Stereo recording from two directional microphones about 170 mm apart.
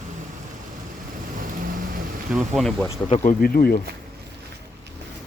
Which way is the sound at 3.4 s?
60° left (ahead or behind).